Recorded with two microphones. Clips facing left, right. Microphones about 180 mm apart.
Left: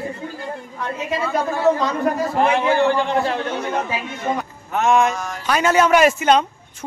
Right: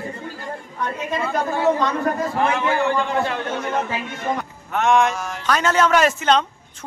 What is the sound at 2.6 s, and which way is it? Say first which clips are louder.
Speech: left 3 dB; 35° left (ahead or behind).